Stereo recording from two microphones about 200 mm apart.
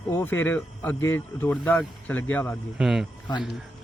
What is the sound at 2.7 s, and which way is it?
Speech, centre (ahead or behind).